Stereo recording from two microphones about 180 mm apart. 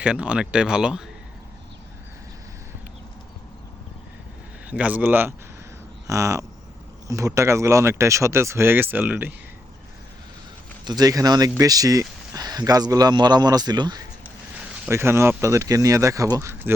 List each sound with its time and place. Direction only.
0.0 s speech: 5° right (ahead or behind)
4.6 s speech: 10° right (ahead or behind)
10.8 s speech: 20° right (ahead or behind)